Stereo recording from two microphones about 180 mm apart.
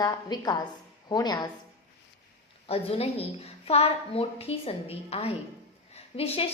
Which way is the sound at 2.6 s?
35° left (ahead or behind).